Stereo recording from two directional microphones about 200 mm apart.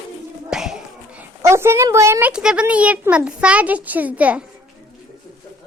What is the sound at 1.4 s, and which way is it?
A child's voice, 15° right (ahead or behind).